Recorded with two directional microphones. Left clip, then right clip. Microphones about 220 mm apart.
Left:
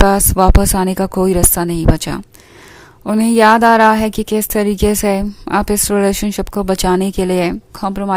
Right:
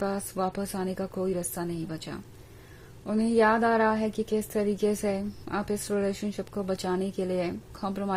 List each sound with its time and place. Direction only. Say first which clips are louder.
0.1 s a woman's voice: left 18 dB; 40° left (ahead or behind)